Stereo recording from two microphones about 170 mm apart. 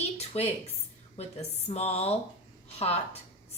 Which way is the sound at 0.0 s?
40° left (ahead or behind).